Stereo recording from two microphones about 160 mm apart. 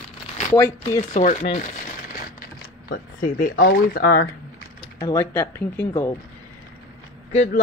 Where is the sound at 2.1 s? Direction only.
65° left (ahead or behind).